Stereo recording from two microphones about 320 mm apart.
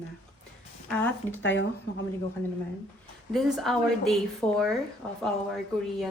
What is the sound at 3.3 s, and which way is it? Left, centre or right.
Speech, centre.